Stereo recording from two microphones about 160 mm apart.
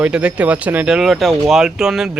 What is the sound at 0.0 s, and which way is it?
Speech, 5° right (ahead or behind).